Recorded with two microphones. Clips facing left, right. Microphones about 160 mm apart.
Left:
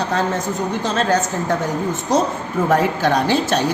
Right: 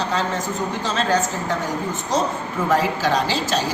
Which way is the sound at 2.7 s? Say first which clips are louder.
Left 2 dB; 55° left (ahead or behind).